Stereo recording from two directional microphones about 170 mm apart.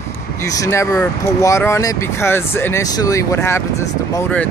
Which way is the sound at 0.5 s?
20° left (ahead or behind).